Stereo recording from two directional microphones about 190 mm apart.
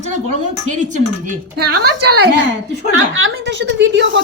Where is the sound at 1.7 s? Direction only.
60° right (ahead or behind).